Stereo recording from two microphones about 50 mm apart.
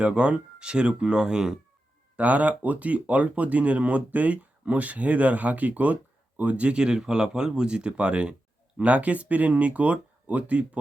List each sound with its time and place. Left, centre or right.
0.0 s speech: centre
2.1 s speech: right